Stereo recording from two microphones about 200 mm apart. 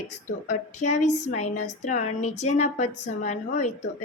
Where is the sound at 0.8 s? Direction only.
35° left (ahead or behind).